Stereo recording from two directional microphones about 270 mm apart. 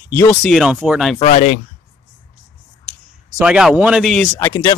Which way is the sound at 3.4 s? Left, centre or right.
Centre.